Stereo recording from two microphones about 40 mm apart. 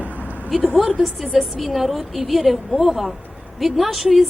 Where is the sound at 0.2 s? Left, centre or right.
Right.